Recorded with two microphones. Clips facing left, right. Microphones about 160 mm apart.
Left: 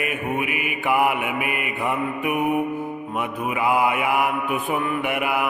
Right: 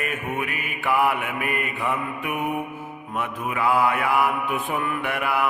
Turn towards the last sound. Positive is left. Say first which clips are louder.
# left 2 dB
turn(degrees=15)  # may be behind; listen again after turning